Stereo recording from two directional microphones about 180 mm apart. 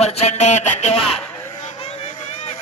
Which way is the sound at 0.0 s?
35° left (ahead or behind).